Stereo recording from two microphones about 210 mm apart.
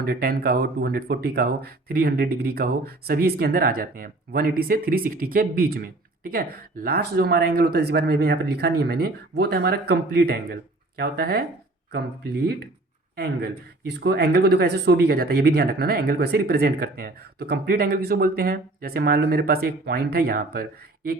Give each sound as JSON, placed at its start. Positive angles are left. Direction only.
{"t": 0.0, "sound": "speech", "side_deg": -45}